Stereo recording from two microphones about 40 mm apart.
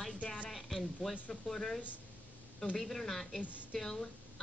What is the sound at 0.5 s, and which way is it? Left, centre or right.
A woman's voice, centre.